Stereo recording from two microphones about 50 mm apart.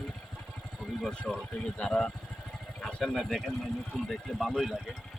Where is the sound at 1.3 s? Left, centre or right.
Left.